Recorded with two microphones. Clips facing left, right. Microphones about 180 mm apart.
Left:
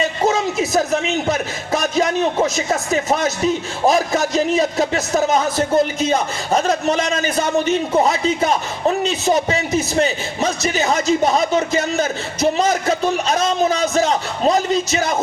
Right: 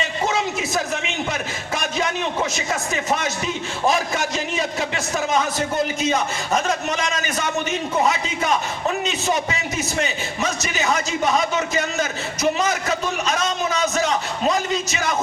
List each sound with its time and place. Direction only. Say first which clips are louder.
0.3 s a man's voice: left 6 dB; 40° left (ahead or behind)